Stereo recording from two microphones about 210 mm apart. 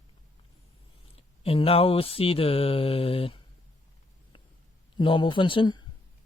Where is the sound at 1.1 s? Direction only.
25° left (ahead or behind).